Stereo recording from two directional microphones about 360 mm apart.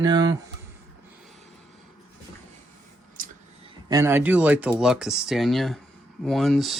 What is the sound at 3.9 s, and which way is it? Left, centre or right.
Speech, centre.